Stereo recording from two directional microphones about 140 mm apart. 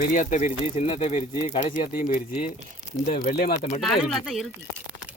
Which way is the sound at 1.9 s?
80° left.